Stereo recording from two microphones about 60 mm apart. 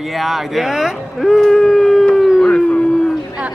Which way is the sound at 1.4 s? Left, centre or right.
Centre.